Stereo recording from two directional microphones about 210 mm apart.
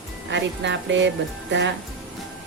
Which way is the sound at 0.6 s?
60° right (ahead or behind).